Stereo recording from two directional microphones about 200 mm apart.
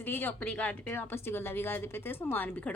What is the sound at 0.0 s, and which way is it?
Speech, 10° left (ahead or behind).